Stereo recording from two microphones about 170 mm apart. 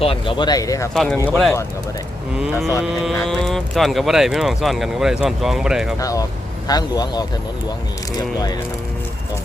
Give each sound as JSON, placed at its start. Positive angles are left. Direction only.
{"t": 0.0, "sound": "speech", "side_deg": 30}
{"t": 0.9, "sound": "speech", "side_deg": 10}
{"t": 6.0, "sound": "speech", "side_deg": 20}